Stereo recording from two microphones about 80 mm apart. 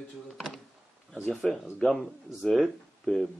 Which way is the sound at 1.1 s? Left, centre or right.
Centre.